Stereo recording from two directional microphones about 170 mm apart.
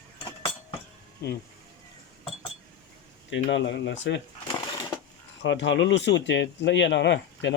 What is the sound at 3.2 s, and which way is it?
Speech, 90° left.